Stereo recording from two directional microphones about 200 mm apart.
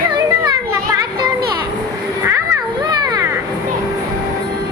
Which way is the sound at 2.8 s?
20° right (ahead or behind).